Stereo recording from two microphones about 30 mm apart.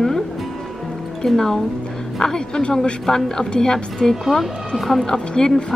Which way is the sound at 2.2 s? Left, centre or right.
Centre.